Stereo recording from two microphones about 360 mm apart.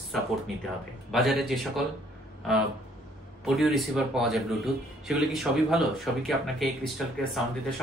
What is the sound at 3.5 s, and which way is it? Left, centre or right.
Speech, centre.